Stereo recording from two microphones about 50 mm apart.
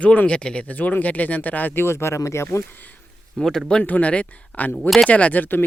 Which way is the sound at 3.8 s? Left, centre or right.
Left.